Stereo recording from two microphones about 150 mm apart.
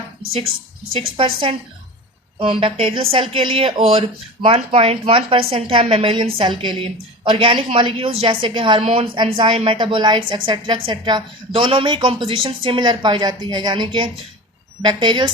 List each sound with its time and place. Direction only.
0.9 s a woman's voice: 35° right (ahead or behind)